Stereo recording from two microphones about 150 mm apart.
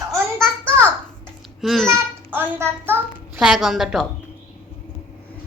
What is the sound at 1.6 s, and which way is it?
Speech, centre (ahead or behind).